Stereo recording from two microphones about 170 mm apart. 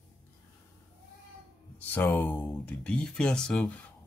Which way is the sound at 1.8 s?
10° left (ahead or behind).